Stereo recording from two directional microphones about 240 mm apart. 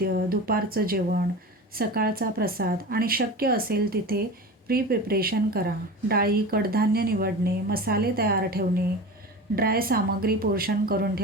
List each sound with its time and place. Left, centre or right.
0.0 s speech: right